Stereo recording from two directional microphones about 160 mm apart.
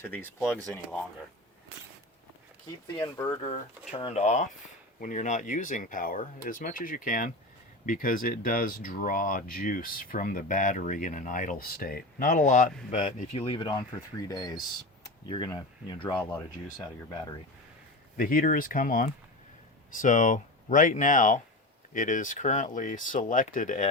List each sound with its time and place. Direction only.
0.0 s speech: 10° left (ahead or behind)
3.0 s speech: 25° left (ahead or behind)
3.4 s speech: 35° left (ahead or behind); by 13.0 s 50° left (ahead or behind)
13.1 s speech: 40° left (ahead or behind)
18.2 s speech: 60° left (ahead or behind)